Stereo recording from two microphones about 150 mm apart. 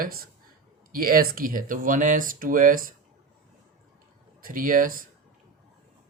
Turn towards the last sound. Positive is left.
turn(degrees=-65)  # may be behind; listen again after turning